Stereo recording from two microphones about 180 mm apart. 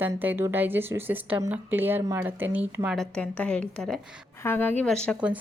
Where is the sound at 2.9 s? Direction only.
5° left (ahead or behind).